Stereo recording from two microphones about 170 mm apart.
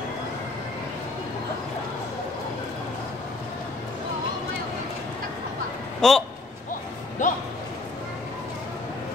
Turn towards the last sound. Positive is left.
turn(degrees=50)  # may be behind; listen again after turning